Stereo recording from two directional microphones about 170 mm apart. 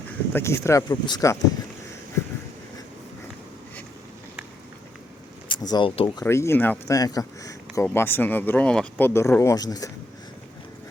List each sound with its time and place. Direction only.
0.3 s speech: 15° left (ahead or behind)
5.5 s speech: 25° left (ahead or behind)
6.2 s speech: 15° left (ahead or behind)